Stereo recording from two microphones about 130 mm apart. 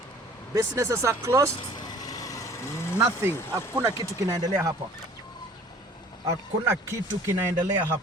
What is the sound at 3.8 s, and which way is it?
Speech, 30° right (ahead or behind).